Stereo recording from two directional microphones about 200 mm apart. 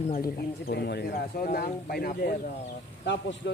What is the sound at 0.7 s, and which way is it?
Speech, 55° left (ahead or behind).